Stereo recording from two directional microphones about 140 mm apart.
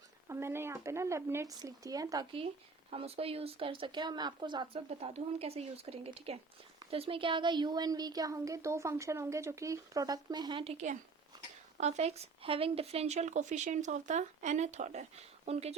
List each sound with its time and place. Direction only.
0.3 s speech: 20° right (ahead or behind)
2.9 s speech: 45° right (ahead or behind)
4.9 s speech: 45° right (ahead or behind)